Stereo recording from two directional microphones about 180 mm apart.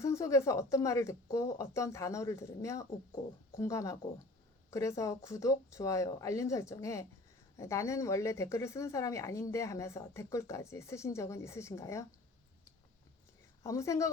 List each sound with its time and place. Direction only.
0.0 s a woman's voice: 15° left (ahead or behind)
13.6 s a woman's voice: 15° left (ahead or behind)